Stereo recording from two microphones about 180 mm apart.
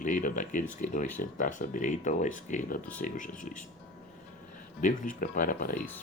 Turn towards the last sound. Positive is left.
turn(degrees=50)  # may be behind; listen again after turning